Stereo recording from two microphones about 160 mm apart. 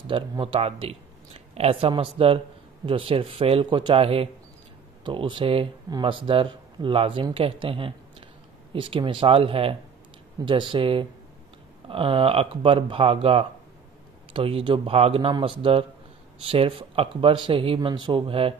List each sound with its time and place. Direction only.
0.0 s speech: 30° right (ahead or behind)